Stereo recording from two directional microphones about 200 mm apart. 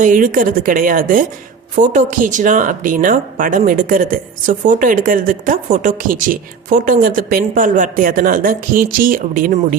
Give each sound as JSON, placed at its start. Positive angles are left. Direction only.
{"t": 0.0, "sound": "speech", "side_deg": -40}